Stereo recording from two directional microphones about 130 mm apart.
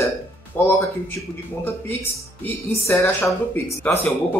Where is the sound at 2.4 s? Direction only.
15° left (ahead or behind).